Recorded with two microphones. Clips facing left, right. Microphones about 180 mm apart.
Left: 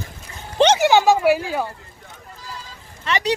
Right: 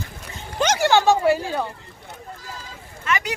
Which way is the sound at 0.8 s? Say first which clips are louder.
Left 2 dB; 15° left (ahead or behind).